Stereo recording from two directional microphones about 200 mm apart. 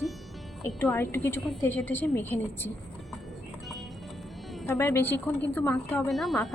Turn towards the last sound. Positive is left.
turn(degrees=0)  # may be behind; listen again after turning